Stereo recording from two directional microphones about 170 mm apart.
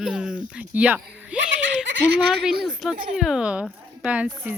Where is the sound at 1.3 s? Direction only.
5° right (ahead or behind).